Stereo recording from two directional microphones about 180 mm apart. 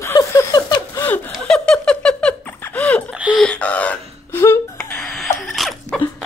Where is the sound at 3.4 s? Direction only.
5° left (ahead or behind).